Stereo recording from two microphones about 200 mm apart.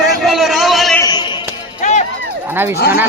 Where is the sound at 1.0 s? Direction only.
20° left (ahead or behind).